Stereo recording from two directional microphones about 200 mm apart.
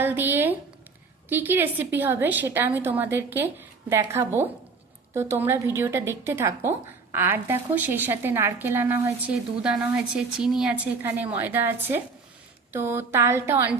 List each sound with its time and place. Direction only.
0.0 s a woman's voice: 10° right (ahead or behind)